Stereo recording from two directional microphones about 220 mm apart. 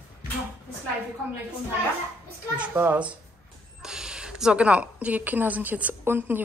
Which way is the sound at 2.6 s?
5° right (ahead or behind).